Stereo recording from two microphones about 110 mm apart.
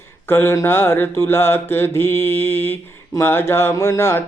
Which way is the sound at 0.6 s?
20° left (ahead or behind).